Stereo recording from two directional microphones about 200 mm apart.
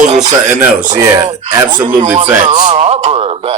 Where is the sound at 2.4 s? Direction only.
30° right (ahead or behind).